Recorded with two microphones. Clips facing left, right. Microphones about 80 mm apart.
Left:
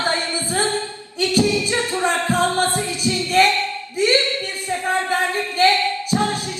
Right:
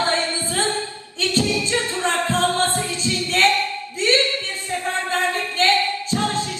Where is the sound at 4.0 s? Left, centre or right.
Centre.